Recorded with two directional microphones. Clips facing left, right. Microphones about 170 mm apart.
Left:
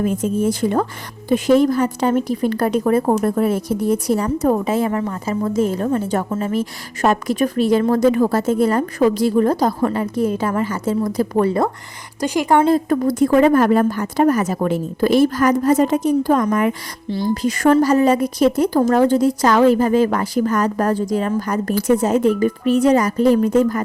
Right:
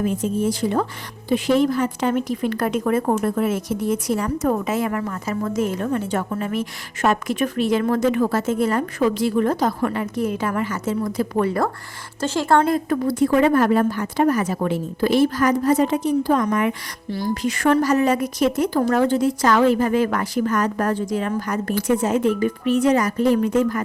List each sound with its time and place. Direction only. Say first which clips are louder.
0.0 s a woman's voice: left 3 dB; 45° left (ahead or behind)
12.2 s speech: left 2 dB; 15° left (ahead or behind)
12.6 s a woman's voice: left 4 dB; 35° left (ahead or behind)
17.1 s speech: left 4 dB; 25° left (ahead or behind)
17.4 s a woman's voice: left 4 dB; 40° left (ahead or behind)